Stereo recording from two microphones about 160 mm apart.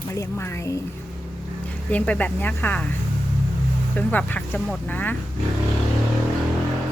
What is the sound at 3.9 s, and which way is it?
A woman's voice, 10° left (ahead or behind).